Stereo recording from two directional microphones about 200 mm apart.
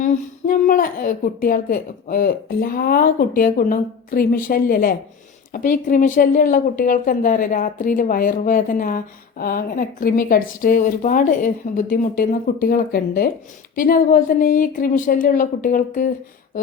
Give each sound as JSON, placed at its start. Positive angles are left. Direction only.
{"t": 0.0, "sound": "speech", "side_deg": 40}